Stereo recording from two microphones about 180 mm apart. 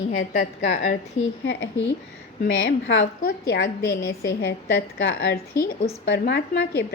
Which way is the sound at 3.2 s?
60° left (ahead or behind).